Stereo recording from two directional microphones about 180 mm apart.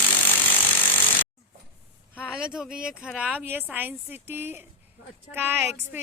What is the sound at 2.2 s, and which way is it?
A woman's voice, 5° right (ahead or behind).